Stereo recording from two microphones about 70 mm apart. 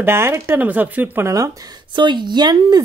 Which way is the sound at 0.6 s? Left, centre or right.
Right.